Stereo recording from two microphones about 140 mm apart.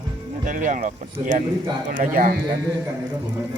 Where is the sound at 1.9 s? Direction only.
80° right.